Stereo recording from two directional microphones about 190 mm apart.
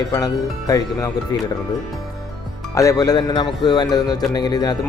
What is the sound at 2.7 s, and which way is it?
Speech, 15° left (ahead or behind).